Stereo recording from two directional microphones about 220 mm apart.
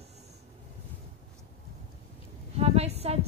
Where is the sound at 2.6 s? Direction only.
30° right (ahead or behind).